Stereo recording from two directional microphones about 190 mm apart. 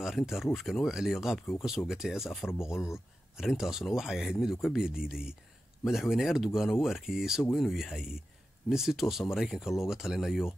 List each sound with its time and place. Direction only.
0.0 s speech: centre (ahead or behind)